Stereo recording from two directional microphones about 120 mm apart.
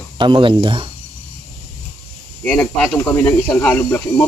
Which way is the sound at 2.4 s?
10° left (ahead or behind).